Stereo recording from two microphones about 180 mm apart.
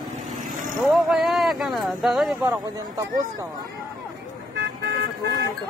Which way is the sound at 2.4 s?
20° right (ahead or behind).